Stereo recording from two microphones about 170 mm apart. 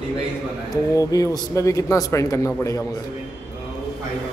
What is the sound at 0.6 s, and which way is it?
A man's voice, 20° left (ahead or behind).